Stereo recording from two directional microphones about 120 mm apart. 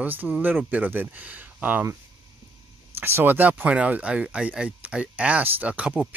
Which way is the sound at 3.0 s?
20° right (ahead or behind).